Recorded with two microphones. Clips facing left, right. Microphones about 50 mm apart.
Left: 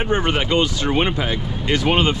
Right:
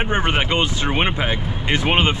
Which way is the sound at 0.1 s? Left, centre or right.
Right.